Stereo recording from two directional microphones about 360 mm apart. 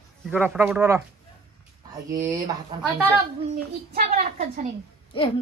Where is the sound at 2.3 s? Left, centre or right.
Centre.